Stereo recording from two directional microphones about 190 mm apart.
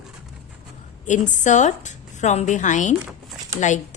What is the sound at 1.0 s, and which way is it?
A woman's voice, 40° left (ahead or behind).